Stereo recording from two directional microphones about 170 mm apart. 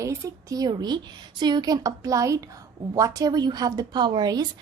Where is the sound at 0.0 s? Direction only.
20° right (ahead or behind).